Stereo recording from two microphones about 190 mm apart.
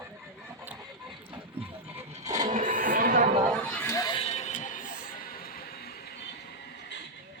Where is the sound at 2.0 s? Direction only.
35° right (ahead or behind).